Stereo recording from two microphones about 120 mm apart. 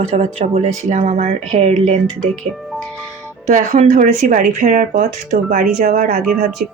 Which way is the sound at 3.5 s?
90° right.